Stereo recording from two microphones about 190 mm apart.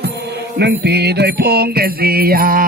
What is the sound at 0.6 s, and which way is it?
Mantra, 60° right (ahead or behind).